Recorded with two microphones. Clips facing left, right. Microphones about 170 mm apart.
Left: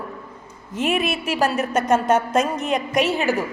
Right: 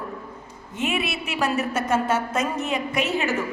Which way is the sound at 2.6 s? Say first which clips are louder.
Left 4 dB; 5° right (ahead or behind).